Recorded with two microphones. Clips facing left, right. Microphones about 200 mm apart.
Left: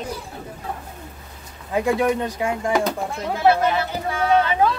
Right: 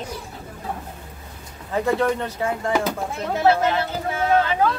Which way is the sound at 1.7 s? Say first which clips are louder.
Left 1 dB; 15° left (ahead or behind).